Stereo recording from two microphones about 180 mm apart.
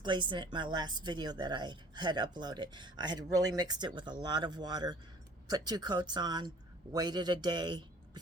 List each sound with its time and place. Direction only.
0.0 s a woman's voice: 25° right (ahead or behind)